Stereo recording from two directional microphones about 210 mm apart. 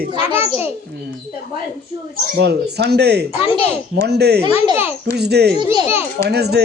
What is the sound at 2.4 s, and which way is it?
Speech, 50° right (ahead or behind).